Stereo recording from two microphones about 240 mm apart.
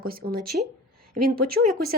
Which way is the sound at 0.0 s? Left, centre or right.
Right.